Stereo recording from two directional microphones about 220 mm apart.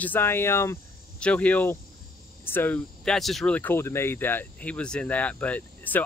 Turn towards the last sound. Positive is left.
turn(degrees=5)  # may be behind; listen again after turning